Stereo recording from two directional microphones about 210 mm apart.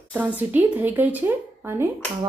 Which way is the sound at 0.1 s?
10° right (ahead or behind).